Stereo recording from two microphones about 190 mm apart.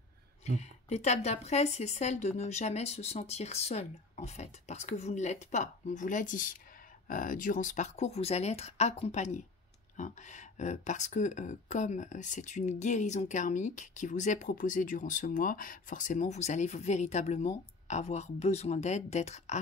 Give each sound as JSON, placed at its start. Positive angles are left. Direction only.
{"t": 0.5, "sound": "speech", "side_deg": 35}